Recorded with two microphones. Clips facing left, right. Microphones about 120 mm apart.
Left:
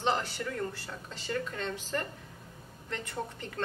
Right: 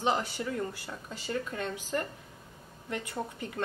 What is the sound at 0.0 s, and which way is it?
A woman's voice, 15° right (ahead or behind).